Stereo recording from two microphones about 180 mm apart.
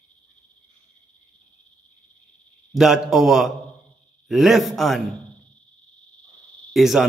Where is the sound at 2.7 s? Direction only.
Centre (ahead or behind).